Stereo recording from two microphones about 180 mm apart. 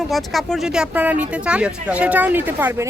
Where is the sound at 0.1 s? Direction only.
Centre (ahead or behind).